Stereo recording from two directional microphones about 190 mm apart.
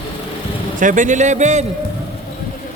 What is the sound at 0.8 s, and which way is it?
Speech, 45° right (ahead or behind).